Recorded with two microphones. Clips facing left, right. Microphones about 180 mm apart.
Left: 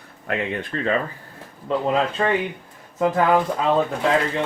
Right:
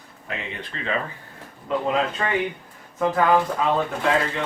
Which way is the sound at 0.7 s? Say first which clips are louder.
Left 9 dB; 50° left (ahead or behind).